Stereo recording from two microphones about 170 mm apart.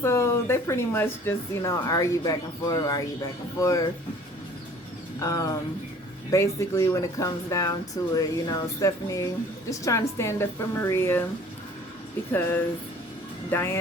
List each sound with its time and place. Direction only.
0.0 s speech: 15° left (ahead or behind)
5.2 s speech: 20° left (ahead or behind)
12.3 s speech: 10° left (ahead or behind)